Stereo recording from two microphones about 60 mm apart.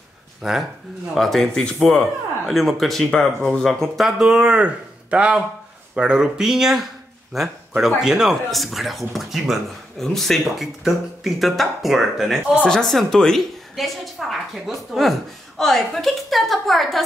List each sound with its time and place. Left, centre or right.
0.4 s speech: centre
1.1 s a woman's voice: centre